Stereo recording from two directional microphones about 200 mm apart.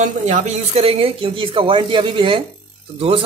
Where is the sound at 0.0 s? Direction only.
35° right (ahead or behind).